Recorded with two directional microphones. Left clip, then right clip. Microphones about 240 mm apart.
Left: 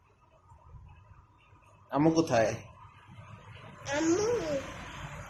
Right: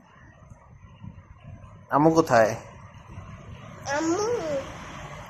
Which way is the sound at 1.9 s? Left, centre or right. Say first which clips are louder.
Right 7 dB; centre.